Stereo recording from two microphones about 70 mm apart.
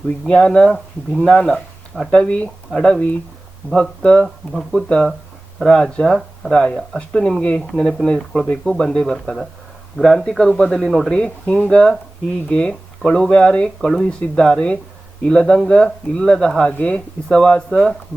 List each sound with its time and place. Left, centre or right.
0.3 s speech: centre
11.1 s speech: centre